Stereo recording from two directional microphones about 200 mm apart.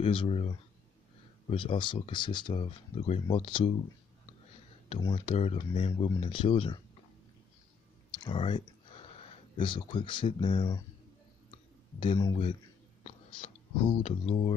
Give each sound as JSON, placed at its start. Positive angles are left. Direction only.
{"t": 0.0, "sound": "speech", "side_deg": 25}
{"t": 4.8, "sound": "speech", "side_deg": 30}
{"t": 8.2, "sound": "speech", "side_deg": 25}
{"t": 12.0, "sound": "speech", "side_deg": 25}